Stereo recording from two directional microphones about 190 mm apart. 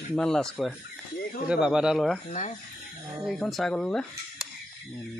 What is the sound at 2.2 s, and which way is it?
Speech, 35° left (ahead or behind).